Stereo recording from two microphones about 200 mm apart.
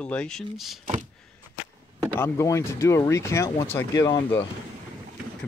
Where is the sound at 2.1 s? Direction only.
15° left (ahead or behind).